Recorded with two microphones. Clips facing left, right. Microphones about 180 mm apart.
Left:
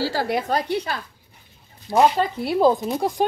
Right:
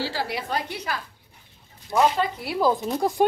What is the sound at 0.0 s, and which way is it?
Speech, 45° left (ahead or behind).